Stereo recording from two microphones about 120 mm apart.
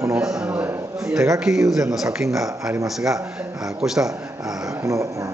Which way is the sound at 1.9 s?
5° right (ahead or behind).